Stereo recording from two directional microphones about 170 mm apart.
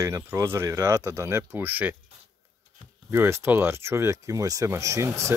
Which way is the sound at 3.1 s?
15° right (ahead or behind).